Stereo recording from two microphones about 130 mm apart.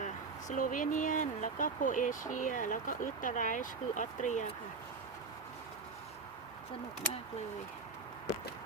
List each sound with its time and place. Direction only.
0.0 s speech: 75° left (ahead or behind)